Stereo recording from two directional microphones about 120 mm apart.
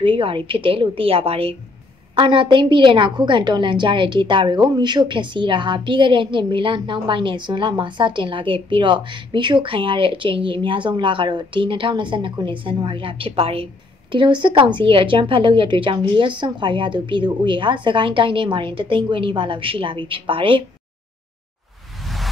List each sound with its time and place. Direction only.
0.0 s a woman's voice: 45° right (ahead or behind)
2.1 s a woman's voice: 40° right (ahead or behind)
14.1 s a woman's voice: 40° right (ahead or behind)
22.0 s a sound: centre (ahead or behind)